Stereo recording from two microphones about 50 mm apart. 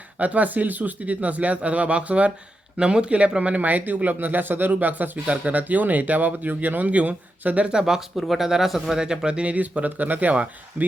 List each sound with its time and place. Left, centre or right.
0.2 s speech: right
7.7 s speech: centre
9.0 s speech: centre